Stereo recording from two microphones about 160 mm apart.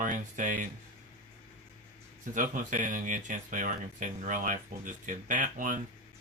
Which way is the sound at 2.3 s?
55° right (ahead or behind).